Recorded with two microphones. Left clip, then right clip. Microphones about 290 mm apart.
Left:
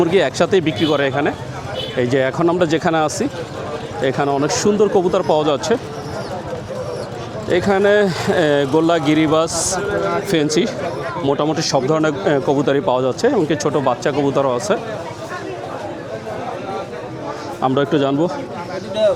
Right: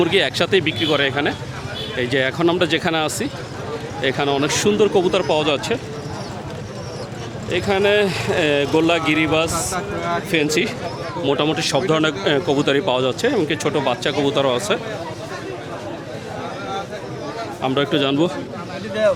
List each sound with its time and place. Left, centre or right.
0.0 s speech: centre
7.5 s speech: left; by 14.8 s centre
17.9 s speech: centre